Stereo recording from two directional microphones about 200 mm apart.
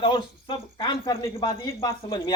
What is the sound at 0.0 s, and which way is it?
Speech, 25° left (ahead or behind).